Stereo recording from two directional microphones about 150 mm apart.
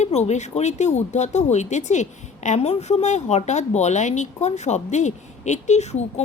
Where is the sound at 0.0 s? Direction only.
50° left (ahead or behind).